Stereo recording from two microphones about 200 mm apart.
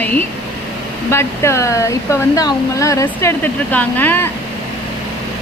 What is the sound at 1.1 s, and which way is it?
Speech, 15° left (ahead or behind).